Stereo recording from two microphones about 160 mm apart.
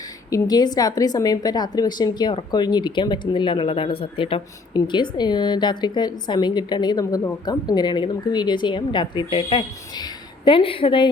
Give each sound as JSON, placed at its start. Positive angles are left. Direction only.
{"t": 0.3, "sound": "a woman's voice", "side_deg": 20}